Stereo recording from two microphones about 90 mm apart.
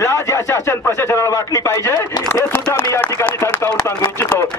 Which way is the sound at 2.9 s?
30° left (ahead or behind).